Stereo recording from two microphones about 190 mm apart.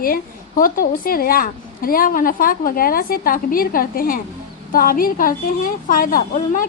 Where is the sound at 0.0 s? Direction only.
50° left (ahead or behind).